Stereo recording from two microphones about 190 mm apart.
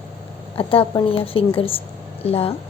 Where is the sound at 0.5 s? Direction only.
30° left (ahead or behind).